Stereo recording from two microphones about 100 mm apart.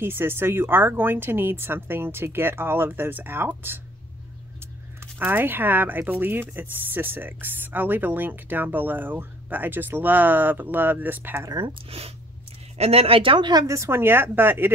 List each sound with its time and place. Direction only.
0.0 s speech: 25° right (ahead or behind)
11.9 s speech: 80° right; by 13.5 s 60° right (ahead or behind)
13.5 s speech: 35° right (ahead or behind)